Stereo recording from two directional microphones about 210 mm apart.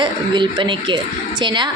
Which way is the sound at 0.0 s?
20° right (ahead or behind).